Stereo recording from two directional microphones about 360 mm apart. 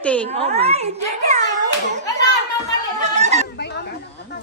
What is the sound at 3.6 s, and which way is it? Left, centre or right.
Chatter, left.